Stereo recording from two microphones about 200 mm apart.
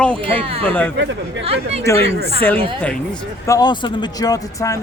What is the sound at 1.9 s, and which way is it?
Speech, 15° left (ahead or behind).